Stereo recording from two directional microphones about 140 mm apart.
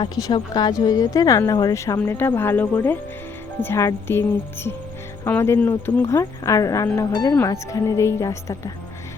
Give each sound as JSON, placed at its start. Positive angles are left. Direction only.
{"t": 0.0, "sound": "speech", "side_deg": 35}
{"t": 7.1, "sound": "speech", "side_deg": 25}